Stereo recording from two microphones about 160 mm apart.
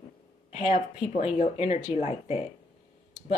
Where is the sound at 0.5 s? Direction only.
50° left (ahead or behind).